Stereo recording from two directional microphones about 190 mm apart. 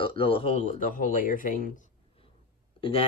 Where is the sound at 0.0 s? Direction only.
30° left (ahead or behind); by 1.9 s 45° left (ahead or behind).